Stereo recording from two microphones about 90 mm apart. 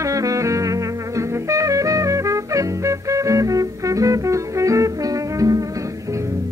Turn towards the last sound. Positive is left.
turn(degrees=-40)  # may be behind; listen again after turning